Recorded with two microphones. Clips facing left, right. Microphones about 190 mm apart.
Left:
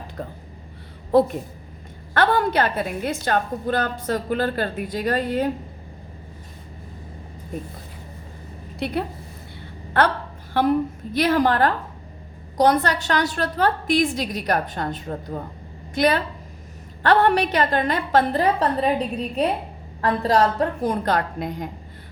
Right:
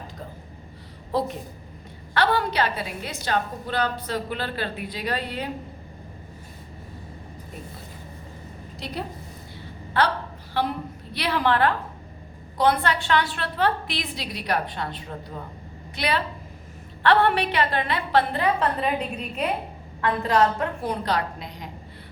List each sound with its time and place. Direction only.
1.1 s a woman's voice: 55° left (ahead or behind)
8.8 s a woman's voice: 60° left (ahead or behind)